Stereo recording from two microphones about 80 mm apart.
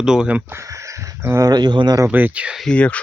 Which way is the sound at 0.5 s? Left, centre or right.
Right.